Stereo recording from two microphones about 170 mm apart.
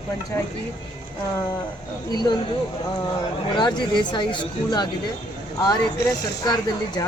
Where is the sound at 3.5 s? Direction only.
25° left (ahead or behind).